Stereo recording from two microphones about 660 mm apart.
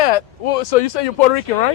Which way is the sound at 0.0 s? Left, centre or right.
Left.